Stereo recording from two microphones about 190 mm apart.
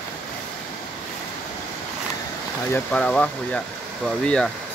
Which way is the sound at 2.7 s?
5° left (ahead or behind).